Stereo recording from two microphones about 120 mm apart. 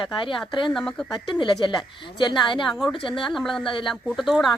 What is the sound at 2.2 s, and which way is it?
Speech, 40° left (ahead or behind).